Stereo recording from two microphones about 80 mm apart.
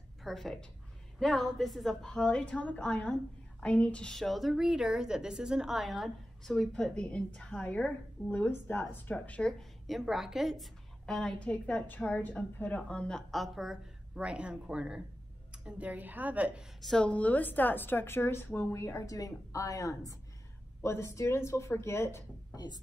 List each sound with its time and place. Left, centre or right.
0.2 s a woman's voice: centre
2.0 s a woman's voice: centre
9.5 s a woman's voice: centre
11.1 s a woman's voice: centre
13.3 s a woman's voice: centre
16.8 s a woman's voice: centre
17.1 s a woman's voice: centre
22.5 s speech: left